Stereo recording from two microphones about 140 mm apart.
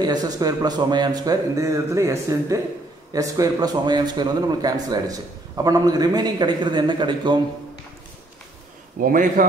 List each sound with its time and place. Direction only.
0.0 s a man's voice: 30° right (ahead or behind)
9.0 s a man's voice: 75° right (ahead or behind)